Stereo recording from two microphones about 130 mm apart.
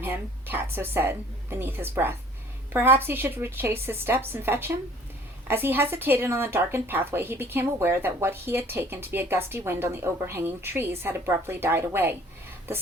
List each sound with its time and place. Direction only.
0.0 s speech: 15° right (ahead or behind)